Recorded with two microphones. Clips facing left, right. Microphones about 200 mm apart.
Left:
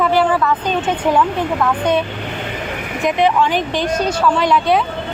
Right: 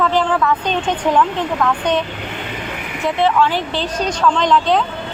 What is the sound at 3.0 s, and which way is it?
Speech, 15° left (ahead or behind).